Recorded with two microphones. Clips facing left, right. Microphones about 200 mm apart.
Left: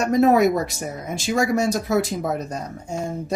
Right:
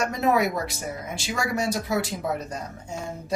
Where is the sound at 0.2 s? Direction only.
45° left (ahead or behind).